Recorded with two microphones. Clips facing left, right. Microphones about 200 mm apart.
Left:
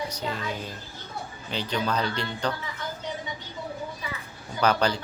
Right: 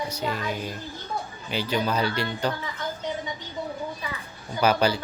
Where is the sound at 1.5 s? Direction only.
10° right (ahead or behind).